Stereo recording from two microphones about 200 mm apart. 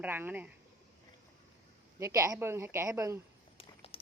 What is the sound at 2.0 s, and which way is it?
A woman's voice, 15° right (ahead or behind).